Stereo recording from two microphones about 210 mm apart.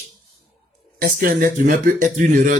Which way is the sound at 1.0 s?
40° right (ahead or behind).